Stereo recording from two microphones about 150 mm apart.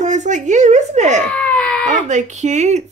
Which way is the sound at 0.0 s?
50° right (ahead or behind).